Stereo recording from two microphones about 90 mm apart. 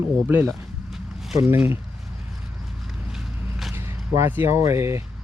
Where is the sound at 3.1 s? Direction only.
5° right (ahead or behind).